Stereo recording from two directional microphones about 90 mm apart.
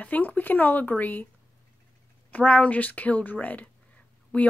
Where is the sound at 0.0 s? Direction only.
20° left (ahead or behind).